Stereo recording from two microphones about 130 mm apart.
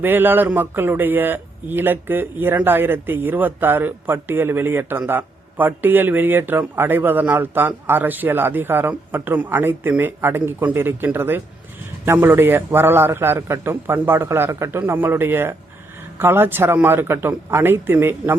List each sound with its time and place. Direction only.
0.0 s a man's voice: 15° right (ahead or behind)